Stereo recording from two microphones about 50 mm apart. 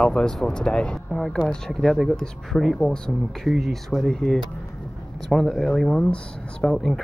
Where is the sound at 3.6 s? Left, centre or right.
Centre.